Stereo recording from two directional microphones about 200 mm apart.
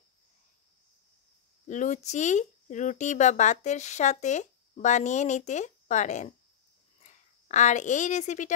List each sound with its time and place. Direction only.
1.7 s speech: 35° left (ahead or behind)